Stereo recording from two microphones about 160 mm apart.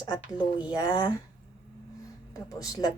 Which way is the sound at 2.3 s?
20° left (ahead or behind).